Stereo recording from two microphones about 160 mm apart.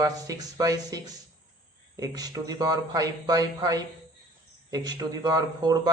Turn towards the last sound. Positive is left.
turn(degrees=-25)  # may be behind; listen again after turning